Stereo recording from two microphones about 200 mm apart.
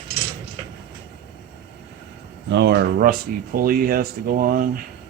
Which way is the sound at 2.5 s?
60° right (ahead or behind).